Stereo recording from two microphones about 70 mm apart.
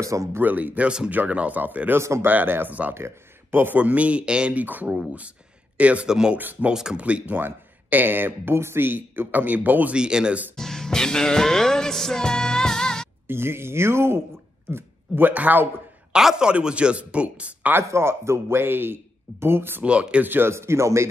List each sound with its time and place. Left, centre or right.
0.0 s speech: right
0.3 s speech: right
2.0 s speech: right
2.2 s a man's voice: right
6.0 s speech: centre
6.3 s speech: right
6.7 s speech: centre
9.9 s speech: centre
10.5 s music: centre
13.3 s speech: right
16.1 s speech: centre
17.8 s speech: right
19.8 s speech: centre
20.2 s speech: right